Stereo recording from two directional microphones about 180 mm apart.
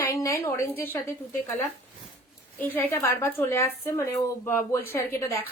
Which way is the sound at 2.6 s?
15° left (ahead or behind).